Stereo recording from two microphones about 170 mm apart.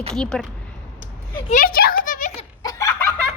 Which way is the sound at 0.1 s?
5° left (ahead or behind).